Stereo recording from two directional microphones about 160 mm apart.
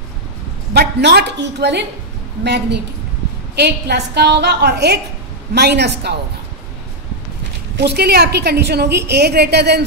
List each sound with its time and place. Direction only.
0.7 s a woman's voice: 90° right
7.7 s a woman's voice: 90° right